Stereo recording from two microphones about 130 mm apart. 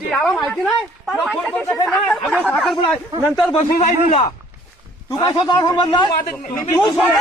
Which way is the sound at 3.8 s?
65° left (ahead or behind).